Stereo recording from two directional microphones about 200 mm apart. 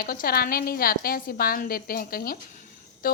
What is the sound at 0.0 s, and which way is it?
A woman's voice, 45° left (ahead or behind).